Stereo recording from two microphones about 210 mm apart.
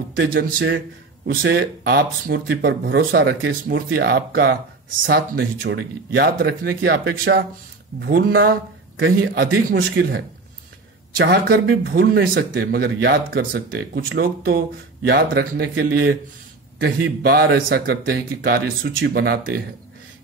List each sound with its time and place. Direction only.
0.2 s speech: 45° right (ahead or behind); by 3.5 s 60° right (ahead or behind)
3.6 s speech: 50° right (ahead or behind)
8.9 s a man's voice: 65° right (ahead or behind); by 10.2 s 50° right (ahead or behind)
11.2 s speech: 45° right (ahead or behind)